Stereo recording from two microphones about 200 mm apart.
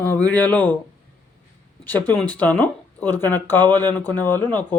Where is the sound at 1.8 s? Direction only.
10° left (ahead or behind).